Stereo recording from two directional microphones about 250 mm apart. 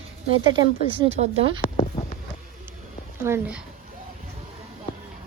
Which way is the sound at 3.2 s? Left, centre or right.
Centre.